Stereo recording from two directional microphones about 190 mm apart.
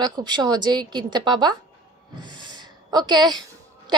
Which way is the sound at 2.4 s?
20° right (ahead or behind).